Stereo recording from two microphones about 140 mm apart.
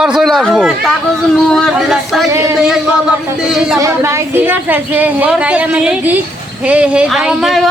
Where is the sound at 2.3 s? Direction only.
20° right (ahead or behind).